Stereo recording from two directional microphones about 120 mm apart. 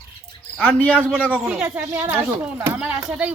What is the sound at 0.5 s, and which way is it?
Speech, 10° left (ahead or behind).